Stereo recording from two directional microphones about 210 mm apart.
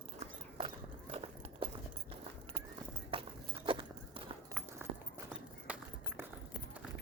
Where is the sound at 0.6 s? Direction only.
30° right (ahead or behind).